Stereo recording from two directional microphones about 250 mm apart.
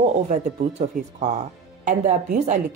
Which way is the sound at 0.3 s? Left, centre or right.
Right.